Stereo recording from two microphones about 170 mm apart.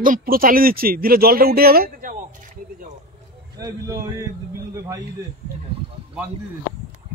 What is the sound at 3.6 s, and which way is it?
Speech, 20° right (ahead or behind).